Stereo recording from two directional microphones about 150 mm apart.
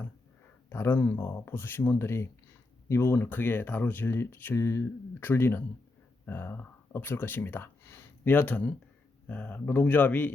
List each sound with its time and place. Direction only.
0.7 s speech: 15° left (ahead or behind)